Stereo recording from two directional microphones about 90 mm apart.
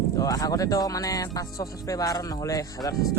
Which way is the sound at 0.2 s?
45° left (ahead or behind).